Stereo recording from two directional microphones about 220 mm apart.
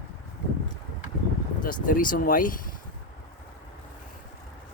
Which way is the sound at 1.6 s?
40° left (ahead or behind).